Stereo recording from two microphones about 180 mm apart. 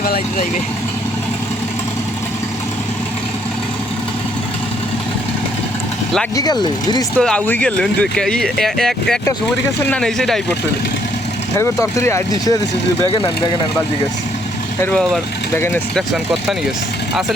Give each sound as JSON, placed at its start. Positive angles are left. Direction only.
{"t": 0.0, "sound": "speech", "side_deg": 50}
{"t": 6.3, "sound": "speech", "side_deg": 20}
{"t": 7.2, "sound": "speech", "side_deg": 5}
{"t": 11.5, "sound": "speech", "side_deg": 15}
{"t": 14.8, "sound": "speech", "side_deg": 5}